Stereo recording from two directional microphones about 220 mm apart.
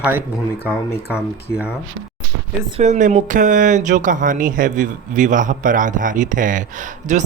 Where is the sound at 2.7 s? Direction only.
30° right (ahead or behind).